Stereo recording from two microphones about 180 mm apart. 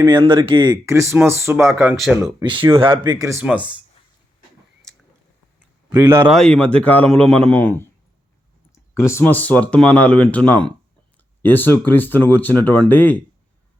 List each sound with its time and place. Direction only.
0.2 s speech: 30° right (ahead or behind)
2.4 s speech: 25° right (ahead or behind)
3.4 s speech: 5° right (ahead or behind)
5.9 s speech: 15° right (ahead or behind)
6.3 s a man's voice: 5° left (ahead or behind)